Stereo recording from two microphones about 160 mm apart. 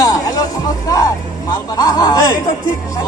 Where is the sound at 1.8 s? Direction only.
25° left (ahead or behind).